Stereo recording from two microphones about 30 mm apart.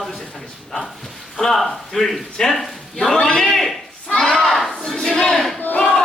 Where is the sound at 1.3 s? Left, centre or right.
Centre.